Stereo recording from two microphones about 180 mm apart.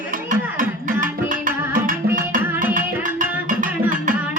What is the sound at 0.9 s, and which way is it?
Music, 50° right (ahead or behind).